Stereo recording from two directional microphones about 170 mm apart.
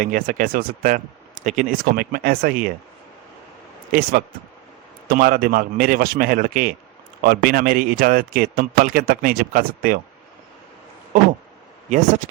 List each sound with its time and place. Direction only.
0.0 s speech: 55° right (ahead or behind)
3.9 s a man's voice: 55° right (ahead or behind)
11.9 s speech: 50° right (ahead or behind)